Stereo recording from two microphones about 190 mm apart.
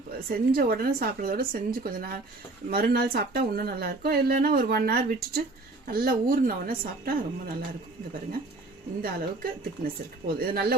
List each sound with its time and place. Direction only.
0.3 s speech: 50° right (ahead or behind)
9.0 s speech: 50° right (ahead or behind)